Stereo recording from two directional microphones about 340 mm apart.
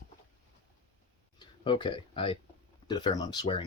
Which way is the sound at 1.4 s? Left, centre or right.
Centre.